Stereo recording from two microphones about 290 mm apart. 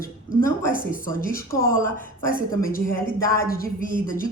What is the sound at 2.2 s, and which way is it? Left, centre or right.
A woman's voice, left.